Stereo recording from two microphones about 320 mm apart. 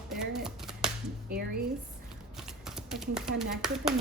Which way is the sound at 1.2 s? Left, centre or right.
Right.